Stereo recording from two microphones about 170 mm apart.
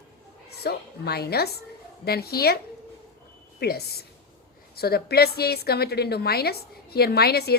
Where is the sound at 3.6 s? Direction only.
70° left (ahead or behind).